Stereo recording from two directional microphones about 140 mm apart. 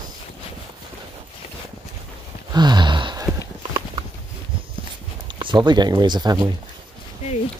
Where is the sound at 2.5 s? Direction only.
30° right (ahead or behind).